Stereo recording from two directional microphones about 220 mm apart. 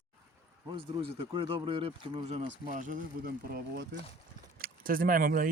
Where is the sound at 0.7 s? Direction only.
25° right (ahead or behind).